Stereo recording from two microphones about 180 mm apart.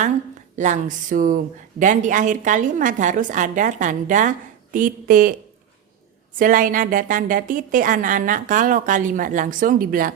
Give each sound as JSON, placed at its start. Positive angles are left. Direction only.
{"t": 0.5, "sound": "a woman's voice", "side_deg": -45}
{"t": 6.4, "sound": "a woman's voice", "side_deg": -50}